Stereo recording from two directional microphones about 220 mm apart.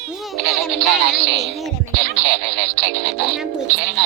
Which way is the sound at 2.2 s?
55° right (ahead or behind).